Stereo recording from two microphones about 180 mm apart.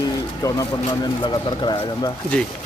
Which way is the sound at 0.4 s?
20° left (ahead or behind).